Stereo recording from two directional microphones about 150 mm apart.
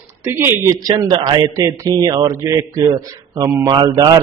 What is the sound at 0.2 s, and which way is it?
Speech, 15° right (ahead or behind).